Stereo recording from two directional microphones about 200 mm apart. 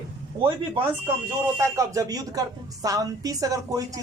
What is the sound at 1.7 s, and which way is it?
A woman's voice, 15° right (ahead or behind).